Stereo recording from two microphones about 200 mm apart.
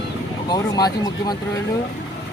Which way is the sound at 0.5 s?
20° left (ahead or behind).